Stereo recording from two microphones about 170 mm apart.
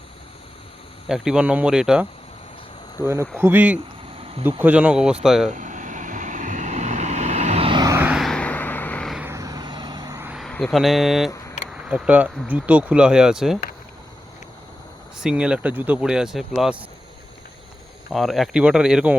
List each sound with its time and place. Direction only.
1.0 s speech: 5° right (ahead or behind)
3.0 s speech: 15° right (ahead or behind)
5.5 s vehicle: 45° right (ahead or behind); by 7.9 s 25° right (ahead or behind)
7.9 s vehicle: 5° right (ahead or behind)
9.1 s vehicle: 15° right (ahead or behind)
10.3 s speech: centre (ahead or behind)
15.2 s speech: 5° right (ahead or behind)
18.1 s speech: centre (ahead or behind)